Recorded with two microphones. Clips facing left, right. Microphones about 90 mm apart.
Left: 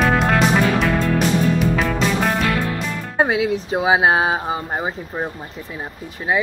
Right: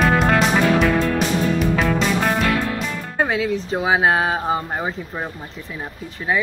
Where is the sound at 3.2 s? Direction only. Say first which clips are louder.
Left 2 dB; 15° left (ahead or behind).